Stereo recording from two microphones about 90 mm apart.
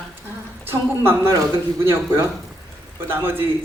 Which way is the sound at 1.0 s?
30° right (ahead or behind).